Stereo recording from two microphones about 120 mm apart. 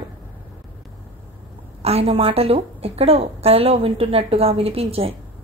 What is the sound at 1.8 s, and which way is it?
A woman's voice, 60° right (ahead or behind).